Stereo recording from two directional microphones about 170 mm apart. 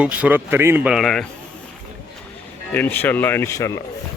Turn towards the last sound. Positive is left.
turn(degrees=15)  # may be behind; listen again after turning